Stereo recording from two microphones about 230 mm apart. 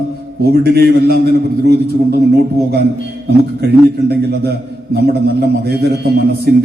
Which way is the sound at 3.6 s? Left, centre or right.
Right.